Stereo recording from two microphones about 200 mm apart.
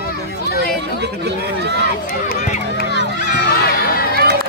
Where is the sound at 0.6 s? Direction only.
60° right (ahead or behind).